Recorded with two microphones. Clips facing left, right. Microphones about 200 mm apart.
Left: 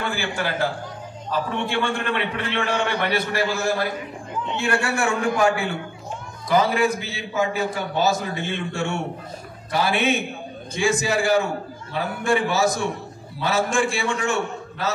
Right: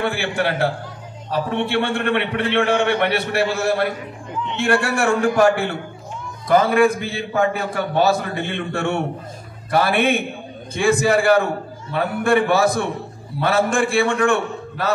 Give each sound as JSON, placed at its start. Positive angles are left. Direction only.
{"t": 0.0, "sound": "a man's voice", "side_deg": -65}
{"t": 5.0, "sound": "a man's voice", "side_deg": -50}